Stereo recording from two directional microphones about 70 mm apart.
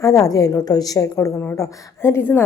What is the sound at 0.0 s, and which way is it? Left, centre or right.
A woman's voice, left.